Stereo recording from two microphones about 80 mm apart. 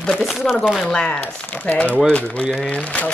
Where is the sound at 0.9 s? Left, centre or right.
Centre.